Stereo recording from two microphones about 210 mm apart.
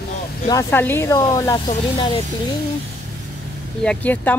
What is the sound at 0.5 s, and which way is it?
Speech, 10° left (ahead or behind).